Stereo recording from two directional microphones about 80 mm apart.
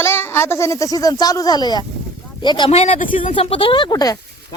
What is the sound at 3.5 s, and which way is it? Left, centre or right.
Speech, left.